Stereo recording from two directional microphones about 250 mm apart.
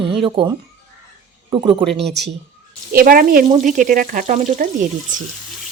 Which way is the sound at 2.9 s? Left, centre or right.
Right.